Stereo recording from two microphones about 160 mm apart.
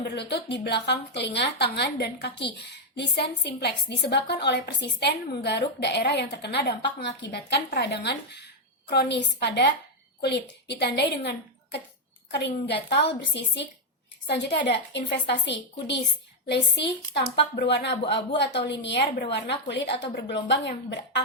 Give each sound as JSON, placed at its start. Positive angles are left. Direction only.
{"t": 0.0, "sound": "a woman's voice", "side_deg": 90}